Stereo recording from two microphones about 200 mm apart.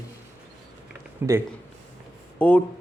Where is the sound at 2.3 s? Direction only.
5° left (ahead or behind).